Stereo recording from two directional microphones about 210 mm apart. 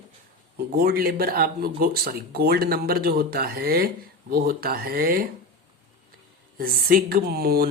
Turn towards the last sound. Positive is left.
turn(degrees=-45)  # may be behind; listen again after turning